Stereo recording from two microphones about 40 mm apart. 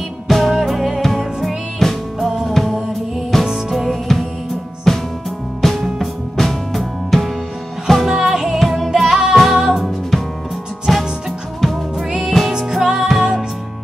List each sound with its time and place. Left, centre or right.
0.3 s music: centre
0.7 s music: centre
1.0 s music: centre
2.1 s music: centre
3.3 s music: centre
4.9 s music: centre
8.1 s music: centre
9.0 s music: centre
9.3 s music: centre
10.9 s music: centre
12.3 s music: centre